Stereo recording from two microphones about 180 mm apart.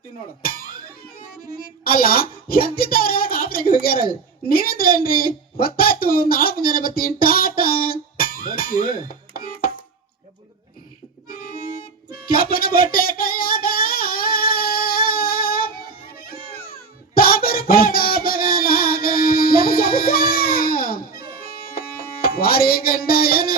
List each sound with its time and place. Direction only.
0.4 s speech: 50° left (ahead or behind)
1.8 s speech: 55° left (ahead or behind)
11.3 s harmonica: 50° left (ahead or behind)
12.2 s music: 55° left (ahead or behind)
17.2 s a sound: 55° left (ahead or behind)
21.8 s music: 55° left (ahead or behind)